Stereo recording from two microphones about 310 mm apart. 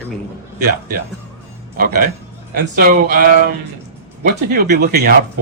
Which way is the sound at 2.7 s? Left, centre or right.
Right.